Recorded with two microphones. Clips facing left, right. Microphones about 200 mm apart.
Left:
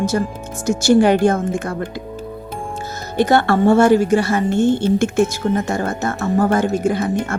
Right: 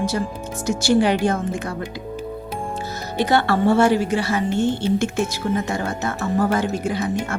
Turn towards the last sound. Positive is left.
turn(degrees=50)  # may be behind; listen again after turning